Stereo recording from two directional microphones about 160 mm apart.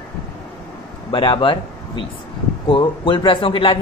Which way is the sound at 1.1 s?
30° left (ahead or behind).